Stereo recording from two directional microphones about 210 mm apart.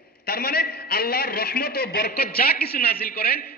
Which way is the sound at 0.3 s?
45° left (ahead or behind).